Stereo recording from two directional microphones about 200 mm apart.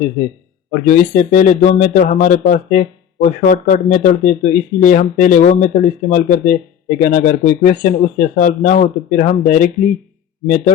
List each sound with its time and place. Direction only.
0.7 s speech: 40° left (ahead or behind)